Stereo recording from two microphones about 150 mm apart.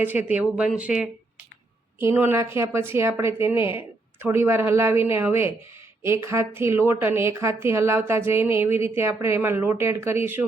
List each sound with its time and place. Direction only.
0.0 s a woman's voice: 10° right (ahead or behind)